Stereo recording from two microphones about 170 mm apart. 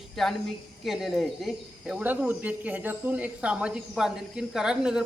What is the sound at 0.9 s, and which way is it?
Speech, centre (ahead or behind).